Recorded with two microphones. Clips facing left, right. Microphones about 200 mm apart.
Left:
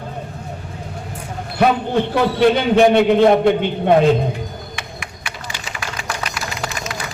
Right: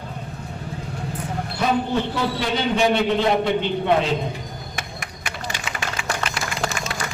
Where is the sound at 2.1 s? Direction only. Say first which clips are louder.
Left 9 dB; 60° left (ahead or behind).